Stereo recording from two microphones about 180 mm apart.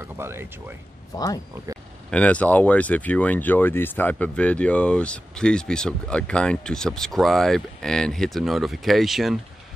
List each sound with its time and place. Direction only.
0.0 s speech: 15° right (ahead or behind)
1.1 s speech: 20° left (ahead or behind)
2.0 s speech: 5° left (ahead or behind)